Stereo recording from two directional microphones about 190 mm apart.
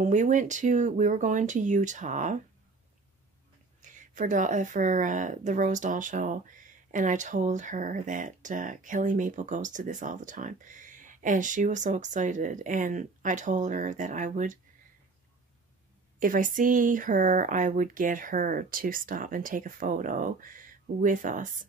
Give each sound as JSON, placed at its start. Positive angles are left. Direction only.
{"t": 0.0, "sound": "speech", "side_deg": -40}
{"t": 3.8, "sound": "speech", "side_deg": -40}
{"t": 16.2, "sound": "speech", "side_deg": -45}